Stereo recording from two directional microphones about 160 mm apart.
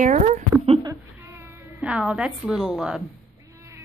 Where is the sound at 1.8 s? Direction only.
5° right (ahead or behind).